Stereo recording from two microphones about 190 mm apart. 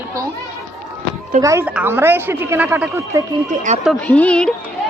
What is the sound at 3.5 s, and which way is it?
Speech, 40° right (ahead or behind).